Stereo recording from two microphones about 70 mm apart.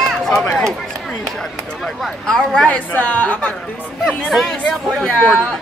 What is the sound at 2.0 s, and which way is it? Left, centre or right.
Speech, centre.